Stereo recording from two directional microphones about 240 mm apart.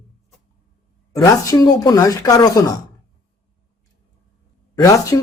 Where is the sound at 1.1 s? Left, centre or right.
Centre.